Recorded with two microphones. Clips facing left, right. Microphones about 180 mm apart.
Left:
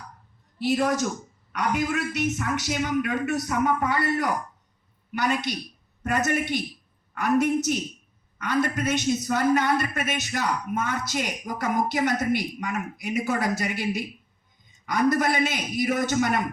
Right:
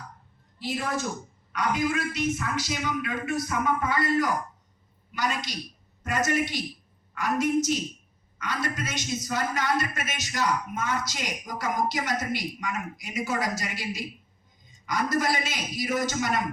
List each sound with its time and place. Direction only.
1.5 s a man's voice: 70° left (ahead or behind)